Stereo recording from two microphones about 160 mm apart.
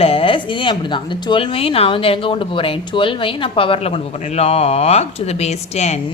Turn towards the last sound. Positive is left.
turn(degrees=45)  # may be behind; listen again after turning